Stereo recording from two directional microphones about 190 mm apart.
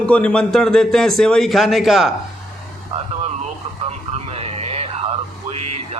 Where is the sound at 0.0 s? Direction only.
5° left (ahead or behind).